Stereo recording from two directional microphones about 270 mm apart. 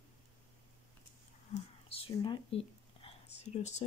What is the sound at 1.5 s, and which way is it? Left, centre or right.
Speech, left.